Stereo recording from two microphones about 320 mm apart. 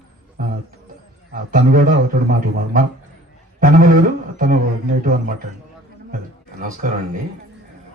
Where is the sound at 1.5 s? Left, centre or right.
Right.